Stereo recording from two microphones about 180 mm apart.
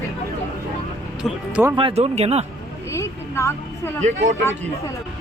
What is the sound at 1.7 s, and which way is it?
Speech, 30° right (ahead or behind).